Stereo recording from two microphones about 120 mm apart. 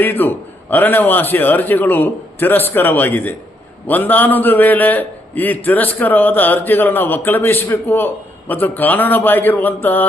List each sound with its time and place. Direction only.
0.0 s a man's voice: 15° left (ahead or behind)